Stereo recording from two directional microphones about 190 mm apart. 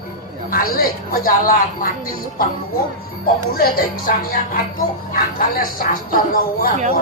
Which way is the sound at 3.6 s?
50° left (ahead or behind).